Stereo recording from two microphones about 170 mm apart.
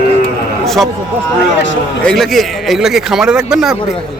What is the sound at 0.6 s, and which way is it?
Speech, centre (ahead or behind).